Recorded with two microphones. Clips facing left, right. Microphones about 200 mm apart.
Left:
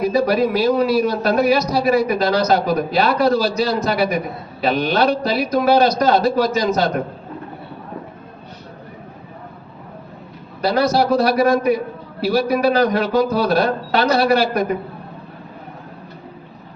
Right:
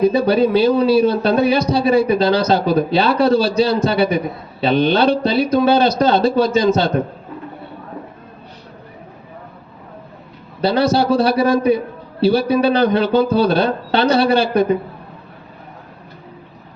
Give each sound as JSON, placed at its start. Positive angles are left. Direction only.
{"t": 0.0, "sound": "a man's voice", "side_deg": -30}
{"t": 10.6, "sound": "a man's voice", "side_deg": -30}